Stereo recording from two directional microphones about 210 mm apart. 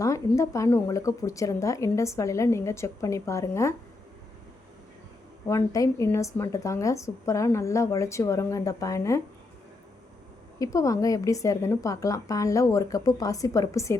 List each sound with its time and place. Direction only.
0.0 s speech: 15° left (ahead or behind)
5.5 s speech: 15° left (ahead or behind)
10.6 s speech: 15° left (ahead or behind)